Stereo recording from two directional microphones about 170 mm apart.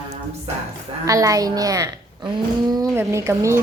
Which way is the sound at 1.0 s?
20° right (ahead or behind).